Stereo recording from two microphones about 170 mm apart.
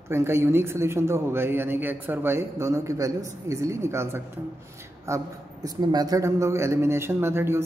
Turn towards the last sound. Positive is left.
turn(degrees=-15)  # may be behind; listen again after turning